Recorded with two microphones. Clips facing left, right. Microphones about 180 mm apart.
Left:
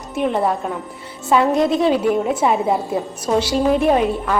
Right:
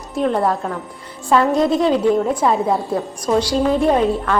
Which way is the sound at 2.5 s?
20° left (ahead or behind).